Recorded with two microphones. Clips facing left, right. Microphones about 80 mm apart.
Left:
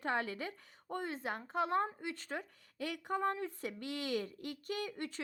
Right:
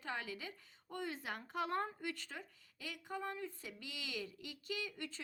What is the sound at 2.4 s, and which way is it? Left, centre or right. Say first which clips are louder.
Speech: left 9 dB; left.